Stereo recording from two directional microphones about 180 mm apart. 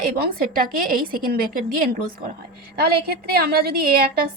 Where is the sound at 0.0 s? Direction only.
55° right (ahead or behind).